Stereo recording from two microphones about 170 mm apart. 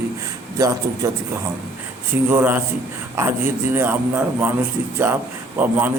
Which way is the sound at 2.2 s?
10° right (ahead or behind).